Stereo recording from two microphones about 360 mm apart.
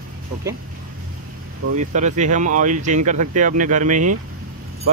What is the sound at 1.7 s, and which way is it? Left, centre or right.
Speech, centre.